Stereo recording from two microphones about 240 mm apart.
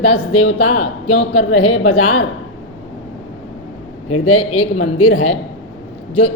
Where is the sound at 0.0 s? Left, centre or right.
Left.